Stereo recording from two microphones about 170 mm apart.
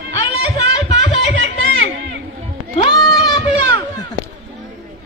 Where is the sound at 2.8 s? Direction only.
25° left (ahead or behind).